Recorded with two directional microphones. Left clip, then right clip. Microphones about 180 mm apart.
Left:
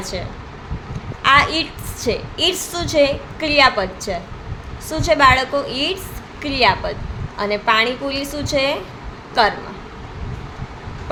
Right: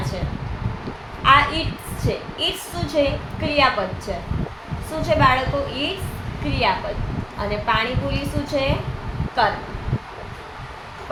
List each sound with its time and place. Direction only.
1.2 s a woman's voice: 60° left (ahead or behind)